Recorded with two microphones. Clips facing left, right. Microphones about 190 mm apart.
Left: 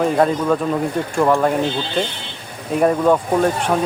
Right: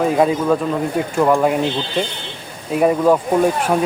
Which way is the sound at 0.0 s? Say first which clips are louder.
Right 1 dB; 5° right (ahead or behind).